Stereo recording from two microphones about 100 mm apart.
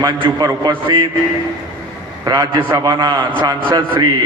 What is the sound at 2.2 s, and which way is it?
A man's voice, 45° right (ahead or behind).